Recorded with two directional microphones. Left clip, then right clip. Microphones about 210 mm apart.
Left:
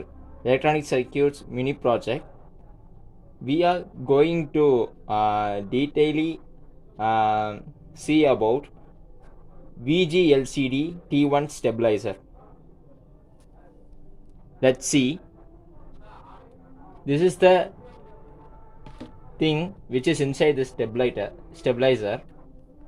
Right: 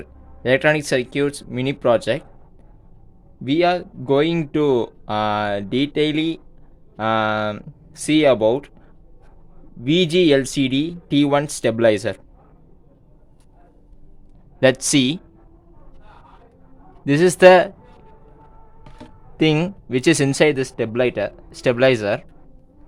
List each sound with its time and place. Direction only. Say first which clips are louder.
0.4 s speech: right 5 dB; 45° right (ahead or behind)
3.5 s speech: right 4 dB; 50° right (ahead or behind)
9.9 s speech: right 4 dB; 50° right (ahead or behind)
14.6 s speech: right 5 dB; 35° right (ahead or behind)
17.1 s speech: right 7 dB; 50° right (ahead or behind)
19.4 s speech: right 6 dB; 55° right (ahead or behind)